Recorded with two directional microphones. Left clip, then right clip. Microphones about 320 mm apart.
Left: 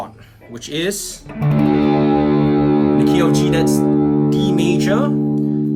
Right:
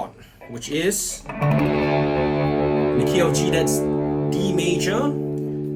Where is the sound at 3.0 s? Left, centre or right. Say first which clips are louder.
Left 4 dB; centre.